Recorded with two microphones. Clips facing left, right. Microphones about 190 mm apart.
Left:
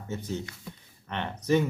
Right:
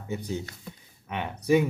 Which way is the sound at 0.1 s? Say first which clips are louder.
Right 2 dB; 15° right (ahead or behind).